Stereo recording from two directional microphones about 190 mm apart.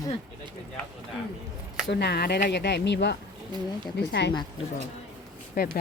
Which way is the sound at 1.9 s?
60° left (ahead or behind).